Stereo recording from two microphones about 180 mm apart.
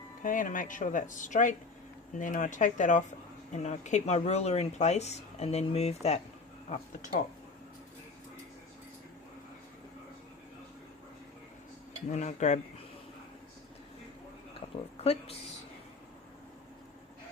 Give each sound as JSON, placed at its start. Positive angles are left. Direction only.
{"t": 0.2, "sound": "speech", "side_deg": 45}
{"t": 12.0, "sound": "speech", "side_deg": 40}
{"t": 15.0, "sound": "speech", "side_deg": 35}